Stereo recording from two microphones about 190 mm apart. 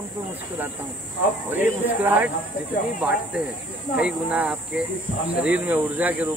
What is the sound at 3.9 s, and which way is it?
Speech, 5° right (ahead or behind).